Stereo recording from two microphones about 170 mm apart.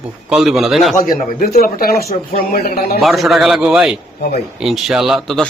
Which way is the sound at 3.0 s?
Centre (ahead or behind).